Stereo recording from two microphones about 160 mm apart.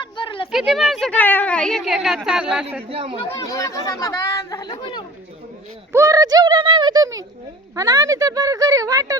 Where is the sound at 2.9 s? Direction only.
35° right (ahead or behind).